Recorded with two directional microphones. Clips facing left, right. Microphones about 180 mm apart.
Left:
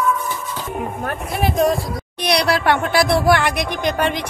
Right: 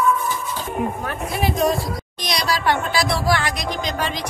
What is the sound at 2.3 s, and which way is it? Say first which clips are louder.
Speech: left 4 dB; 65° left (ahead or behind).